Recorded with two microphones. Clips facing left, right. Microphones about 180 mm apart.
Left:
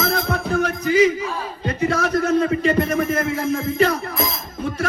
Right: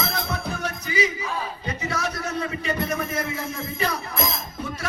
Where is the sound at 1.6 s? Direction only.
55° left (ahead or behind).